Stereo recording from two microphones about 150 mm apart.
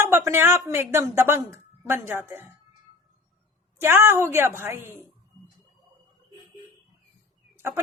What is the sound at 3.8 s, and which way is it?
A woman's voice, 15° right (ahead or behind).